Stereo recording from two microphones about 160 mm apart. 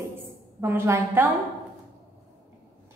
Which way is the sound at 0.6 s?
15° right (ahead or behind).